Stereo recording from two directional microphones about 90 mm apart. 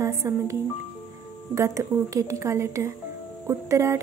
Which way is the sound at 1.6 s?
35° right (ahead or behind).